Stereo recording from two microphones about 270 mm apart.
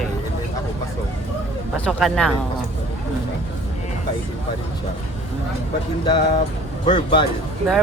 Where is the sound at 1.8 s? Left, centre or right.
Centre.